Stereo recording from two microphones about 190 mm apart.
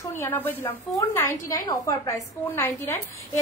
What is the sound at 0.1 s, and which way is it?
A woman's voice, 10° left (ahead or behind).